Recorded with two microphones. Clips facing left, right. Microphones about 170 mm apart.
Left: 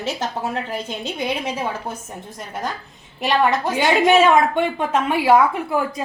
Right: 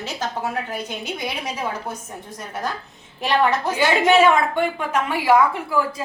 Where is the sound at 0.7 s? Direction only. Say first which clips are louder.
Left 2 dB; 15° right (ahead or behind).